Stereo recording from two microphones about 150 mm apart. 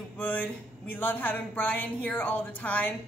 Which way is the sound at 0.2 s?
10° left (ahead or behind).